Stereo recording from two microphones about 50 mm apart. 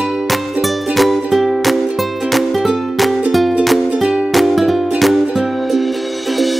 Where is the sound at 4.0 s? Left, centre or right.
Centre.